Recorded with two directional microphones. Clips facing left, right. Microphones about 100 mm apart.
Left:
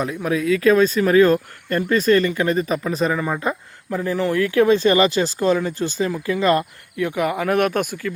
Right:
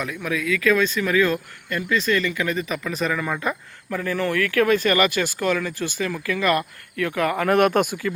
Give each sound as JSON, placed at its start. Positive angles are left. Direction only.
{"t": 0.0, "sound": "speech", "side_deg": 35}
{"t": 7.4, "sound": "speech", "side_deg": 0}